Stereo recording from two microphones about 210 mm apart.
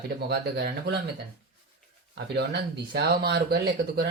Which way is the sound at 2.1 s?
55° right (ahead or behind).